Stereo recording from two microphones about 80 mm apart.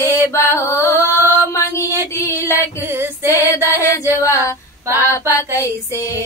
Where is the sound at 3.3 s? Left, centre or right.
Left.